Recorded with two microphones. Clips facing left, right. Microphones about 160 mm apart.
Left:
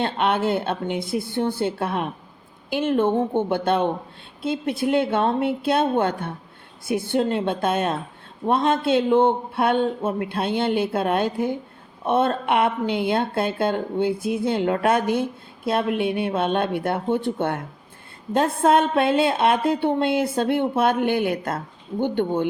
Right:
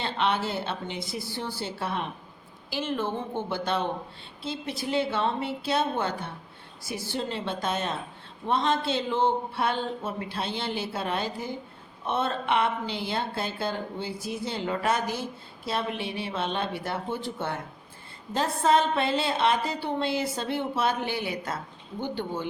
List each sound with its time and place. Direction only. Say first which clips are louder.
0.0 s speech: left 6 dB; 55° left (ahead or behind)